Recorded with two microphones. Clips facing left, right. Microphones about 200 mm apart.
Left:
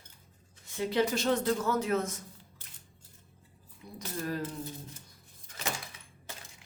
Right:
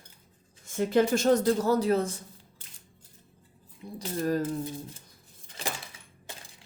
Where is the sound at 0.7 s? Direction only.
50° right (ahead or behind); by 2.2 s 30° right (ahead or behind).